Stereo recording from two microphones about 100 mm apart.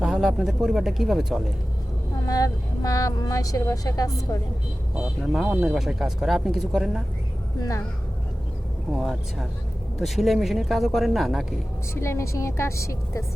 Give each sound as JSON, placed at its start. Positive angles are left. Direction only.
{"t": 0.0, "sound": "speech", "side_deg": -5}
{"t": 2.2, "sound": "speech", "side_deg": 35}
{"t": 4.9, "sound": "speech", "side_deg": -5}
{"t": 5.5, "sound": "speech", "side_deg": -15}
{"t": 5.7, "sound": "speech", "side_deg": -5}
{"t": 7.6, "sound": "speech", "side_deg": 35}
{"t": 9.0, "sound": "speech", "side_deg": 0}
{"t": 11.9, "sound": "a woman's voice", "side_deg": 30}